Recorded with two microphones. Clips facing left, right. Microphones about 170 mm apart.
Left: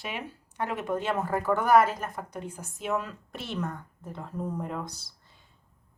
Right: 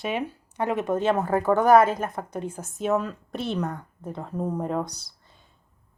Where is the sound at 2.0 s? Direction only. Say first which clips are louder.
Right 6 dB; 45° right (ahead or behind).